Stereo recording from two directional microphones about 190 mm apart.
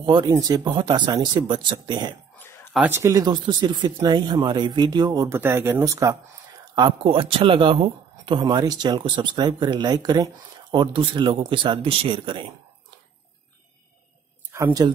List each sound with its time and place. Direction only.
0.0 s speech: 25° right (ahead or behind)
2.7 s speech: 10° right (ahead or behind); by 12.5 s 25° right (ahead or behind)
14.5 s speech: 15° right (ahead or behind)